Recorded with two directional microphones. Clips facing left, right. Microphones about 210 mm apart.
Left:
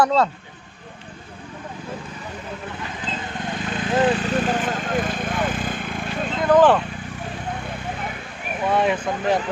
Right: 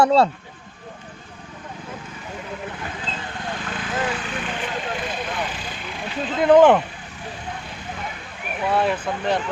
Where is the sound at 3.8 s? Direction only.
30° left (ahead or behind); by 6.0 s 50° left (ahead or behind).